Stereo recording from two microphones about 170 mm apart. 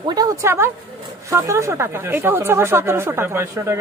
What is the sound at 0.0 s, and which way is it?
Speech, 20° right (ahead or behind).